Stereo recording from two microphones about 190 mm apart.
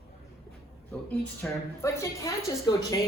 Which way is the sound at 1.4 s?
15° left (ahead or behind).